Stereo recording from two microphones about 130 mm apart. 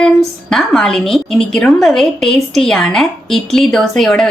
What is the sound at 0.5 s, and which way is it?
Speech, 5° left (ahead or behind).